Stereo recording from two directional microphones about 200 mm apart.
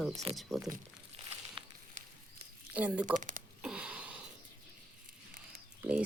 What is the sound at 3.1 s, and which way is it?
Speech, 40° right (ahead or behind).